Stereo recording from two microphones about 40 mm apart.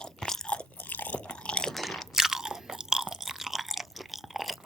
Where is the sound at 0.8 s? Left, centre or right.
Left.